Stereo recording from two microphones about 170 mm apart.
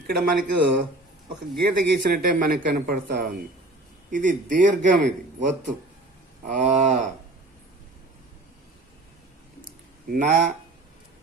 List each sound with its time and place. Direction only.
0.1 s a man's voice: 65° right (ahead or behind); by 6.9 s 45° right (ahead or behind)
10.1 s a man's voice: 50° right (ahead or behind)